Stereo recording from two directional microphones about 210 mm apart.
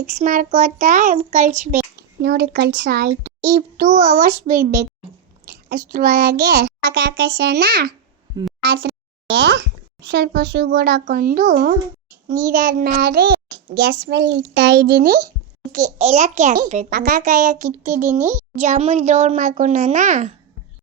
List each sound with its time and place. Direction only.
0.0 s a child's voice: 35° right (ahead or behind)
3.8 s a child's voice: 35° right (ahead or behind)
15.7 s a child's voice: 35° right (ahead or behind)
17.8 s a child's voice: 15° right (ahead or behind)
18.6 s a child's voice: 35° right (ahead or behind)